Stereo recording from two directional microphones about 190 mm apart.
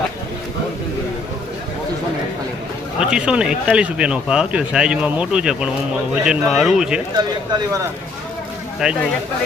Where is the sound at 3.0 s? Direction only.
5° right (ahead or behind).